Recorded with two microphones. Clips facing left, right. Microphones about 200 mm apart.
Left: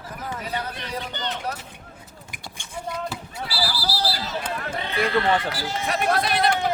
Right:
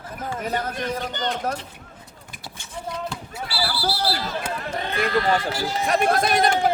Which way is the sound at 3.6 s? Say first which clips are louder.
Right 2 dB; 25° right (ahead or behind).